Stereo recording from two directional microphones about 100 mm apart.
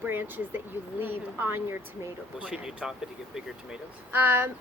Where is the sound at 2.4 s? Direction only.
10° right (ahead or behind).